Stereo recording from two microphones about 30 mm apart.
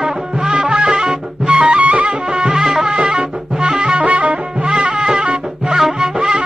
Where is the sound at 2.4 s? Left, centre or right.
Centre.